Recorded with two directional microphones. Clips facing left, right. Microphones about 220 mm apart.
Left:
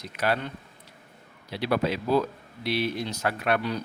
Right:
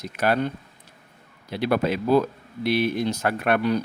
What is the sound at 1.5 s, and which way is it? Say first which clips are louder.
Speech: right 3 dB; 50° right (ahead or behind).